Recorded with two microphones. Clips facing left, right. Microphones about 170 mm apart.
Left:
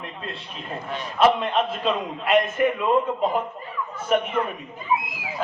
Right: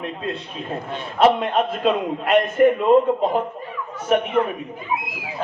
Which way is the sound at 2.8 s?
30° right (ahead or behind).